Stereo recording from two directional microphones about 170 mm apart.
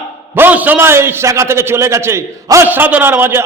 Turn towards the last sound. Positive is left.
turn(degrees=-10)  # may be behind; listen again after turning